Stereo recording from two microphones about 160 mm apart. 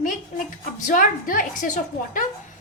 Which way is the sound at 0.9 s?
60° left (ahead or behind).